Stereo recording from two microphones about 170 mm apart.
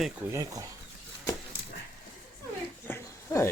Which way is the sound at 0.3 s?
20° right (ahead or behind).